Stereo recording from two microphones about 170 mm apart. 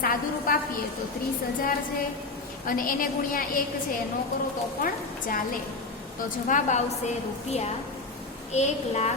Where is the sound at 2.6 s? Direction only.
55° left (ahead or behind).